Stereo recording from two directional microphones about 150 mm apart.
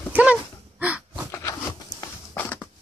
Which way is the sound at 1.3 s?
20° left (ahead or behind).